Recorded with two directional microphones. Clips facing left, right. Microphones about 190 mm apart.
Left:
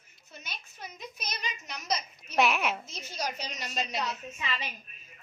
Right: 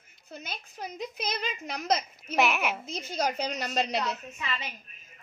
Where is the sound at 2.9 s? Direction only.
55° right (ahead or behind).